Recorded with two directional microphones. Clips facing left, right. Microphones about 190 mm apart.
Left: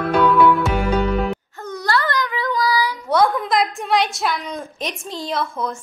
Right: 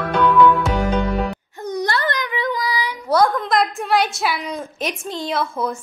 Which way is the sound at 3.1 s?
Centre (ahead or behind).